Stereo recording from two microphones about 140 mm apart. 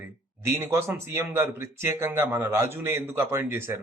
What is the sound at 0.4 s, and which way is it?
Speech, 20° right (ahead or behind).